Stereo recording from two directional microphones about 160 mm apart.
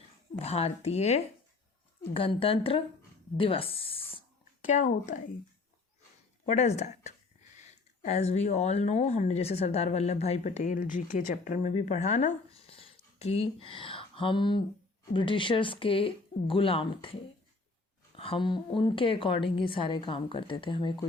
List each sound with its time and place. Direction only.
0.3 s a woman's voice: 40° left (ahead or behind)
4.6 s speech: 50° left (ahead or behind)
6.4 s speech: 45° left (ahead or behind)
11.7 s a woman's voice: 45° left (ahead or behind)
18.2 s a woman's voice: 30° left (ahead or behind)